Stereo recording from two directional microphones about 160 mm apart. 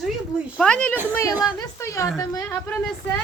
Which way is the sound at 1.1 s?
20° left (ahead or behind).